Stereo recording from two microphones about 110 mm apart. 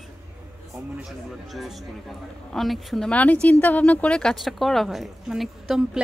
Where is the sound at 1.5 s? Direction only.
Centre (ahead or behind).